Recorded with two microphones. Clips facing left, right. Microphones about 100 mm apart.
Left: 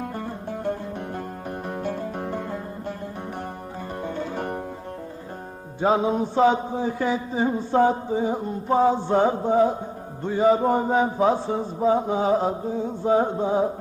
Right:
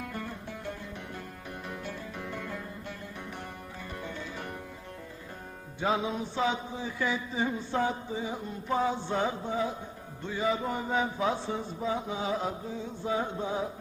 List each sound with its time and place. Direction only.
0.0 s music: 35° left (ahead or behind)
4.0 s music: 45° left (ahead or behind)
5.8 s a sound: 40° left (ahead or behind)